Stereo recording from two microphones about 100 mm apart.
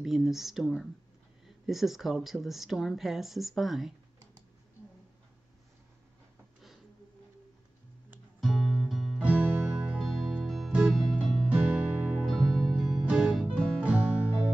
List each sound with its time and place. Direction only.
0.0 s speech: 5° right (ahead or behind)
8.4 s music: centre (ahead or behind)
9.2 s music: 15° right (ahead or behind)
9.9 s music: centre (ahead or behind)
11.4 s music: 10° right (ahead or behind)
12.3 s music: centre (ahead or behind)
13.6 s music: 5° left (ahead or behind)